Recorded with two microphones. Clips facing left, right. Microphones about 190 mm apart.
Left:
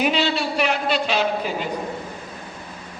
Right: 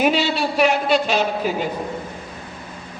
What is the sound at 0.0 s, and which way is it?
Speech, 50° right (ahead or behind).